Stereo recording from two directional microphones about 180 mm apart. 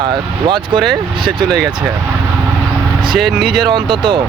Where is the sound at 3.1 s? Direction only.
Centre (ahead or behind).